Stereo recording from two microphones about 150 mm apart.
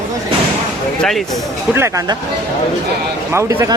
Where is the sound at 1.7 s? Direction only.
15° right (ahead or behind).